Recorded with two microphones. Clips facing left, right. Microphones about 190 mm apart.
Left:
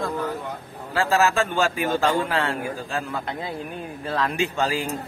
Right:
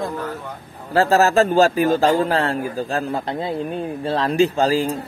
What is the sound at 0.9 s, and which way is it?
Speech, 40° right (ahead or behind).